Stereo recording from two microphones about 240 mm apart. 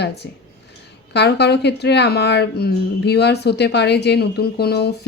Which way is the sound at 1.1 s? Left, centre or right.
Left.